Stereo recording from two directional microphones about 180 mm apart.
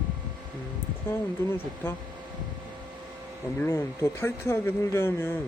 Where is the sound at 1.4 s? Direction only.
15° left (ahead or behind).